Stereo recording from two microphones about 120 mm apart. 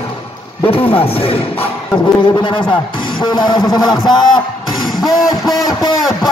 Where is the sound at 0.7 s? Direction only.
50° left (ahead or behind).